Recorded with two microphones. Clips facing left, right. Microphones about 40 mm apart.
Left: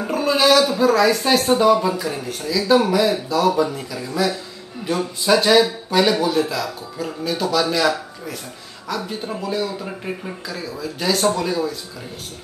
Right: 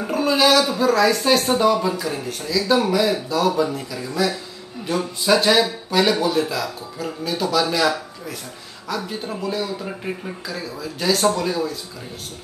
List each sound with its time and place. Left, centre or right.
0.0 s speech: centre